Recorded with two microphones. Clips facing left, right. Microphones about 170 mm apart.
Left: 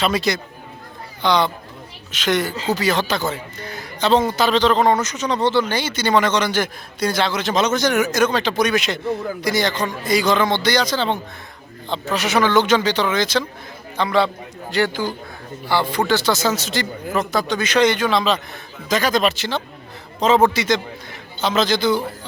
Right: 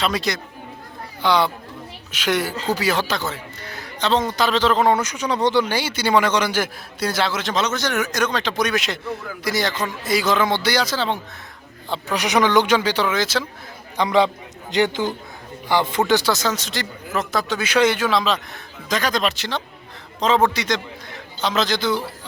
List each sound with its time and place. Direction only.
0.0 s a man's voice: centre (ahead or behind)
3.2 s a man's voice: 15° left (ahead or behind); by 7.5 s centre (ahead or behind)
7.5 s a man's voice: 15° left (ahead or behind); by 11.2 s 5° right (ahead or behind)
11.9 s a man's voice: 15° right (ahead or behind)
16.3 s a man's voice: 5° left (ahead or behind)